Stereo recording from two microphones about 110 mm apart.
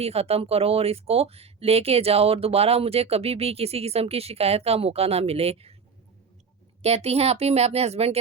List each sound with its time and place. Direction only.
0.0 s speech: 65° right (ahead or behind)
6.8 s a woman's voice: 70° right (ahead or behind)